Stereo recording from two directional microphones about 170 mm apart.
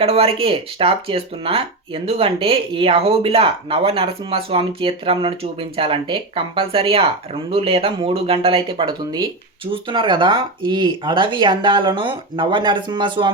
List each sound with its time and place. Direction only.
0.0 s speech: 35° right (ahead or behind)